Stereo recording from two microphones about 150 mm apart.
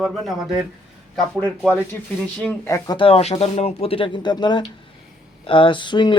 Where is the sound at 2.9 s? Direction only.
35° left (ahead or behind).